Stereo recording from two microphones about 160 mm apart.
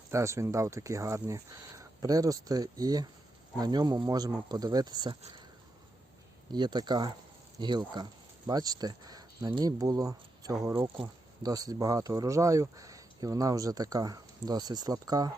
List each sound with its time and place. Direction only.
0.1 s speech: 20° right (ahead or behind)
6.5 s speech: 25° right (ahead or behind)